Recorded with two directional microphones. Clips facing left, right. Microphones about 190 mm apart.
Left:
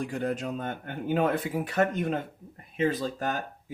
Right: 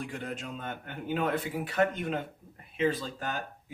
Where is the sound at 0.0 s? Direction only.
45° left (ahead or behind).